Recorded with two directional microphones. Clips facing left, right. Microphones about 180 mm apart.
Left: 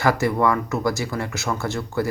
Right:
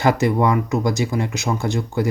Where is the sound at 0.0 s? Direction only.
20° right (ahead or behind).